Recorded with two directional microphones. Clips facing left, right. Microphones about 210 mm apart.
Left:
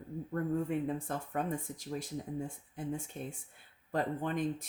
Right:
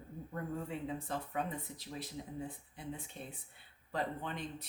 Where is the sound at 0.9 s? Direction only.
50° left (ahead or behind).